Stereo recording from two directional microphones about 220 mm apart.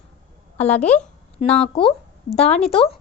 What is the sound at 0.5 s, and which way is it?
Speech, 30° left (ahead or behind).